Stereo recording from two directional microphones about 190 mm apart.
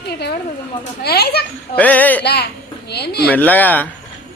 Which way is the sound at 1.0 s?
55° left (ahead or behind).